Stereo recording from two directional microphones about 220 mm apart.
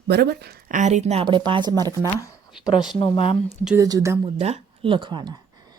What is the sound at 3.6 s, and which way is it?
Speech, 15° right (ahead or behind).